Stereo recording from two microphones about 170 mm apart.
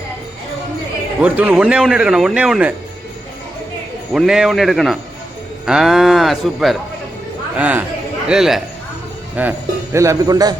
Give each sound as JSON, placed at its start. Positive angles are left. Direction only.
{"t": 1.2, "sound": "a man's voice", "side_deg": -10}
{"t": 4.1, "sound": "a man's voice", "side_deg": -5}